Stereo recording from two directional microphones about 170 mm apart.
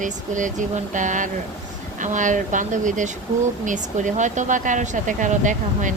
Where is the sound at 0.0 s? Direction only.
50° right (ahead or behind).